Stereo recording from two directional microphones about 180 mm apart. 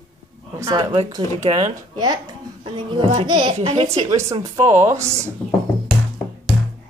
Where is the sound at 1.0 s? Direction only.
35° right (ahead or behind).